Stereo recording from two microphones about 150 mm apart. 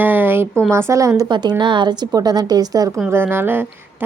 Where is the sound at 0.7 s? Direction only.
20° right (ahead or behind).